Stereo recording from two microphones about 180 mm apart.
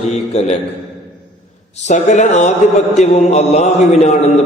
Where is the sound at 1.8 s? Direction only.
40° left (ahead or behind).